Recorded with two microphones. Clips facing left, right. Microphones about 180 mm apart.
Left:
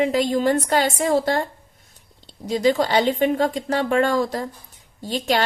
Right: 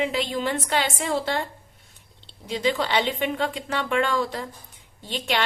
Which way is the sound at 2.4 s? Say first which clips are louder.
Left 6 dB; 40° left (ahead or behind).